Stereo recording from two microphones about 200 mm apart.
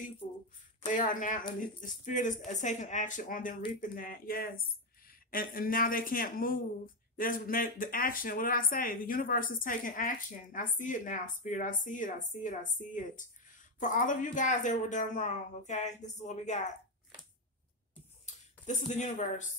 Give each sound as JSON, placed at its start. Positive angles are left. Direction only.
{"t": 0.8, "sound": "a man's voice", "side_deg": 40}
{"t": 18.2, "sound": "speech", "side_deg": 35}